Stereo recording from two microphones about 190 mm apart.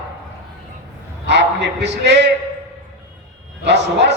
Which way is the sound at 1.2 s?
65° right (ahead or behind).